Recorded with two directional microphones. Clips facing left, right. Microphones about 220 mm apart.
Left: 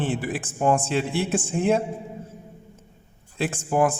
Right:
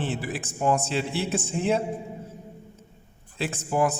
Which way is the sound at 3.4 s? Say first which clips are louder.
Left 3 dB; 50° left (ahead or behind).